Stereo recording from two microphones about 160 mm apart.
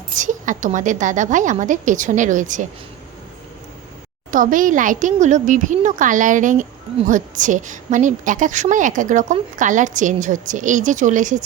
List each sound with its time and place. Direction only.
0.2 s a woman's voice: 50° right (ahead or behind)
4.3 s a woman's voice: 55° right (ahead or behind)